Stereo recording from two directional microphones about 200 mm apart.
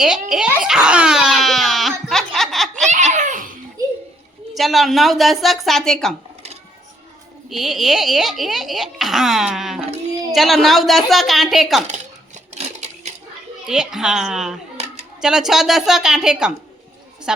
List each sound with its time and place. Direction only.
0.0 s baby cry: 5° right (ahead or behind)
2.9 s belly laugh: 35° right (ahead or behind)
4.5 s speech: centre (ahead or behind)
7.5 s speech: centre (ahead or behind)
12.5 s a sound: 35° right (ahead or behind)
13.7 s speech: 5° right (ahead or behind)